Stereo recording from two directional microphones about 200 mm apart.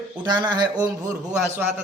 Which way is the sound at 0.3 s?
20° right (ahead or behind).